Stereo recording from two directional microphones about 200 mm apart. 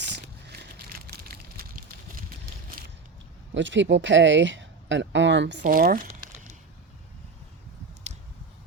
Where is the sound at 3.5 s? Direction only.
65° right (ahead or behind).